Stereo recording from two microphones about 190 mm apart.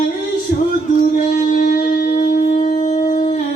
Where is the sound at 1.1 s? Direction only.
45° left (ahead or behind).